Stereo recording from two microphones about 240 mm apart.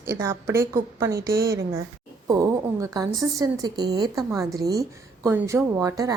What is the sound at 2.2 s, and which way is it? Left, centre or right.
Speech, centre.